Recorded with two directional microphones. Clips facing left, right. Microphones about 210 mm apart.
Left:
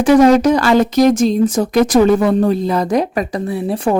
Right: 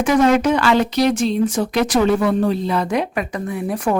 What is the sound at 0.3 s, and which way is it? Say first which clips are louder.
A woman's voice: left 4 dB; 40° left (ahead or behind).